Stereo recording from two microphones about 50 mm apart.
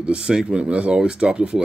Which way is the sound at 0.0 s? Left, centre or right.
Centre.